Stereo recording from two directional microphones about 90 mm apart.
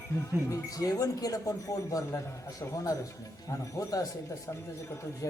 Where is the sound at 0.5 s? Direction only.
40° left (ahead or behind).